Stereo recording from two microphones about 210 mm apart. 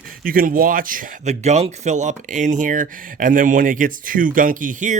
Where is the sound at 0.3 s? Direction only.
45° right (ahead or behind).